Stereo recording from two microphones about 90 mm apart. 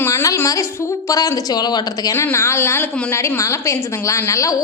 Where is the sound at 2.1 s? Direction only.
30° left (ahead or behind).